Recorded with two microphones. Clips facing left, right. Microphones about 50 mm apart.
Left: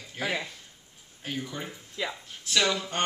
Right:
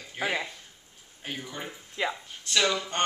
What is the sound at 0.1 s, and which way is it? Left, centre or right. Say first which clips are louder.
Speech: right 1 dB; centre.